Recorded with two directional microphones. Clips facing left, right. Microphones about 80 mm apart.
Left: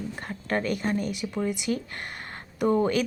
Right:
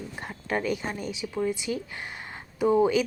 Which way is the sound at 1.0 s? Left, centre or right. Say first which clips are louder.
Left 2 dB; left.